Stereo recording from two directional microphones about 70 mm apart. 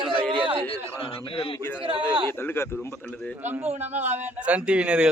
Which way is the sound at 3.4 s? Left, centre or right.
Right.